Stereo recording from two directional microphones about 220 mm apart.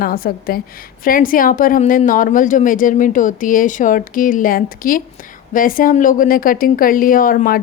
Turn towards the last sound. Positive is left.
turn(degrees=40)  # may be behind; listen again after turning